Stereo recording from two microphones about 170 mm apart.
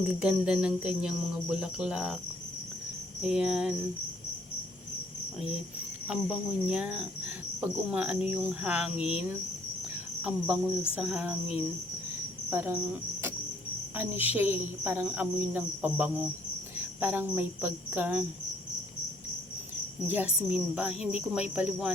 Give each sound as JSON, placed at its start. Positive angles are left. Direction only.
{"t": 0.2, "sound": "cricket", "side_deg": -5}
{"t": 3.2, "sound": "cricket", "side_deg": -5}
{"t": 6.1, "sound": "cricket", "side_deg": -5}
{"t": 10.2, "sound": "cricket", "side_deg": -5}
{"t": 13.9, "sound": "cricket", "side_deg": -10}
{"t": 20.1, "sound": "cricket", "side_deg": -10}